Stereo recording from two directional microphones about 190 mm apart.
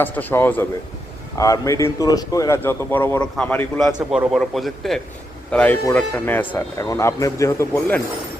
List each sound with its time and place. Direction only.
0.0 s a man's voice: 10° left (ahead or behind)